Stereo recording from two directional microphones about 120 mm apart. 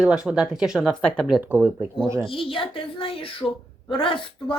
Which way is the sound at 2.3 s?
45° left (ahead or behind).